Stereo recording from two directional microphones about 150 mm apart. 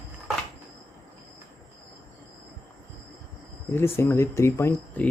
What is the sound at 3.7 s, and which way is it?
Speech, 15° left (ahead or behind).